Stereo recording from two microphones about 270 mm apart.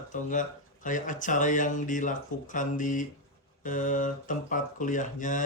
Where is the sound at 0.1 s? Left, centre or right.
Left.